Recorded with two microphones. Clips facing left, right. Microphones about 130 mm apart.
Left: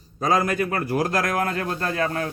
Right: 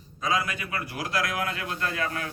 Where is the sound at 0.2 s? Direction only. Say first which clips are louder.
Left 7 dB; 45° left (ahead or behind).